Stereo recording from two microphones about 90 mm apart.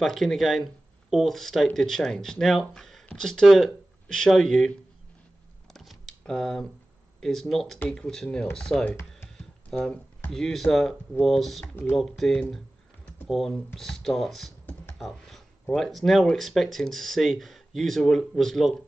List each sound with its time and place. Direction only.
0.0 s speech: 5° left (ahead or behind)
5.7 s typing: centre (ahead or behind)
7.2 s speech: 5° left (ahead or behind)
11.6 s speech: 25° left (ahead or behind)
11.9 s speech: centre (ahead or behind)